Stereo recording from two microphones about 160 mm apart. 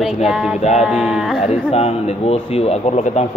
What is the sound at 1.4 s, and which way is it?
Speech, 40° left (ahead or behind).